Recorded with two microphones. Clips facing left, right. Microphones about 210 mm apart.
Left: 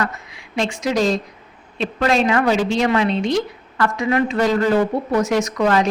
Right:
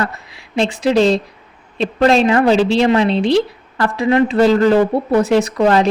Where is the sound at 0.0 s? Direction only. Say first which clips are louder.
Right 2 dB; 35° right (ahead or behind).